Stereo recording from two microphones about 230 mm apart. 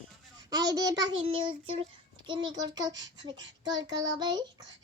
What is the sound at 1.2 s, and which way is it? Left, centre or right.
Child singing, right.